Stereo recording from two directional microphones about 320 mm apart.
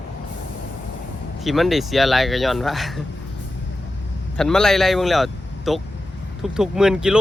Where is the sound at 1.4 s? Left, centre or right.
Centre.